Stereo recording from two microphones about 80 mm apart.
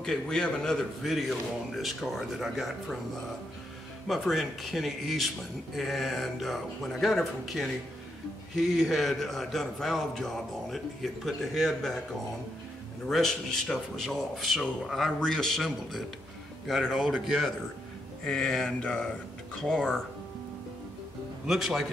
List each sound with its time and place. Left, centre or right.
0.0 s a man's voice: centre
4.1 s a man's voice: centre
13.1 s a man's voice: centre
21.5 s a man's voice: centre